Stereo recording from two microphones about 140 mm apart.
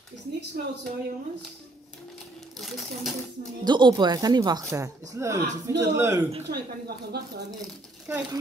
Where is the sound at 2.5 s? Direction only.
Centre (ahead or behind).